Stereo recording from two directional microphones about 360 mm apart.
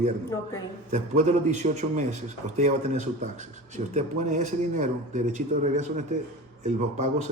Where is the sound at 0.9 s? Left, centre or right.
Centre.